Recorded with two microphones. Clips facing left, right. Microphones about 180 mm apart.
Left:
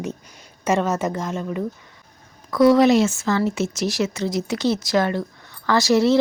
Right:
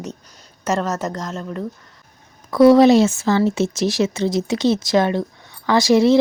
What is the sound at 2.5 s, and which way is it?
Speech, 30° right (ahead or behind).